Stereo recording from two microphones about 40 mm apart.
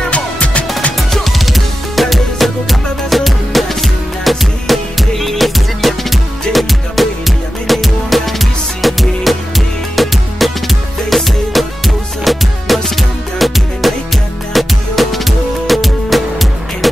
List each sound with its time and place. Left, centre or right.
0.1 s music: left
0.9 s music: centre